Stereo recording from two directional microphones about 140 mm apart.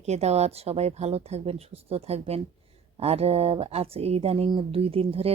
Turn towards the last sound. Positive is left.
turn(degrees=-45)  # may be behind; listen again after turning